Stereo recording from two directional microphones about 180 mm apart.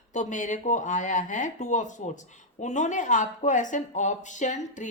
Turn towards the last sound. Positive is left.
turn(degrees=45)  # may be behind; listen again after turning